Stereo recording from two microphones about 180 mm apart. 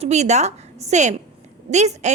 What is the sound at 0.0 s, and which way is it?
A woman's voice, 40° right (ahead or behind).